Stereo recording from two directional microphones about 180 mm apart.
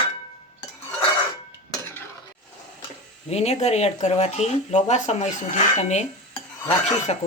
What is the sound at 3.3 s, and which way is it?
Speech, 35° left (ahead or behind).